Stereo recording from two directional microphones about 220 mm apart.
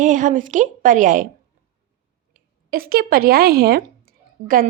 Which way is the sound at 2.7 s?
45° right (ahead or behind).